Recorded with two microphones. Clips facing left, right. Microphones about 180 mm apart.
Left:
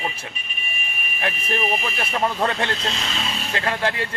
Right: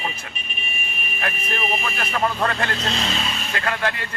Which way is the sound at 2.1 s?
25° left (ahead or behind).